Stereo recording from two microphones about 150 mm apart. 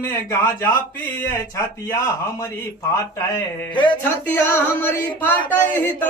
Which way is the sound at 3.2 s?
20° left (ahead or behind).